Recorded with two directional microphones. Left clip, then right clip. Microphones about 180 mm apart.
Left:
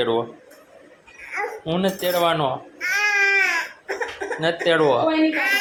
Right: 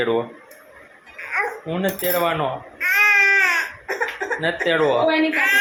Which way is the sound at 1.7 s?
15° left (ahead or behind).